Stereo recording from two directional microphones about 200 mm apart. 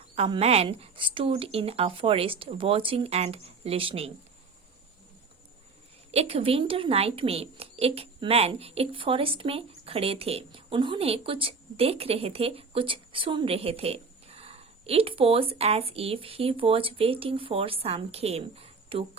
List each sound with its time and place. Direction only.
0.2 s a woman's voice: 30° right (ahead or behind)
6.1 s a woman's voice: 30° right (ahead or behind)